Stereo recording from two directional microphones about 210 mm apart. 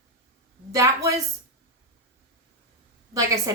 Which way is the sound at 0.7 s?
15° right (ahead or behind).